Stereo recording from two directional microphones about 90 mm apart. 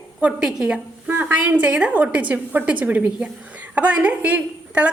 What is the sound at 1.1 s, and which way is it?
A woman's voice, 20° right (ahead or behind).